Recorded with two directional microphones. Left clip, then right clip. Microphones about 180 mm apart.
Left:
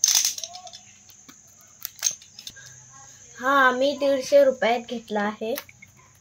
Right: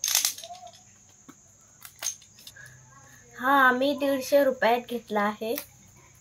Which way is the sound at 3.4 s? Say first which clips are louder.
Left 2 dB; 35° left (ahead or behind).